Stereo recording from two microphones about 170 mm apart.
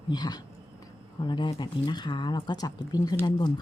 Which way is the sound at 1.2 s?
25° left (ahead or behind).